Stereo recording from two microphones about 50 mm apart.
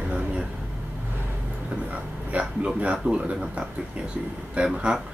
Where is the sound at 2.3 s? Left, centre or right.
Right.